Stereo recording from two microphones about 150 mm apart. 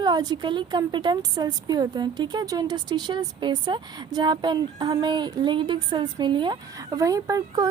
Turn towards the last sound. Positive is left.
turn(degrees=-25)  # may be behind; listen again after turning